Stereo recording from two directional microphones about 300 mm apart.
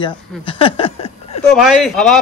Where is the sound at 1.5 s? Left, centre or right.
Centre.